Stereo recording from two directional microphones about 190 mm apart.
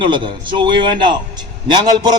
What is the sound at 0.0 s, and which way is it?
A man's voice, 25° right (ahead or behind).